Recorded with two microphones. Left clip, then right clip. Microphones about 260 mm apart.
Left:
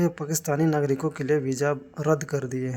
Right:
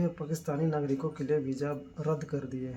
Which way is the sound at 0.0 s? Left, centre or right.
Left.